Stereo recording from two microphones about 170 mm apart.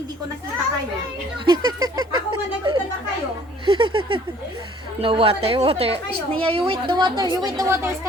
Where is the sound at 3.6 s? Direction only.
30° right (ahead or behind).